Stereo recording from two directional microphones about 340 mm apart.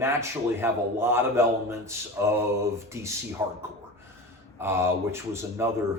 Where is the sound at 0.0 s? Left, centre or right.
Centre.